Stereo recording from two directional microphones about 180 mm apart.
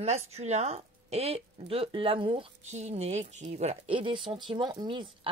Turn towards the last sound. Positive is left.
turn(degrees=-25)  # may be behind; listen again after turning